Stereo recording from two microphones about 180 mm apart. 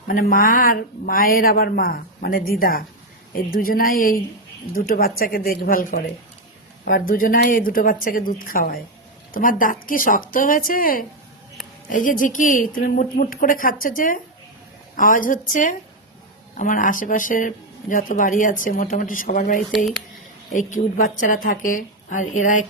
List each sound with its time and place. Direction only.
0.1 s speech: 50° left (ahead or behind)
19.7 s speech: centre (ahead or behind)
20.5 s speech: 45° left (ahead or behind)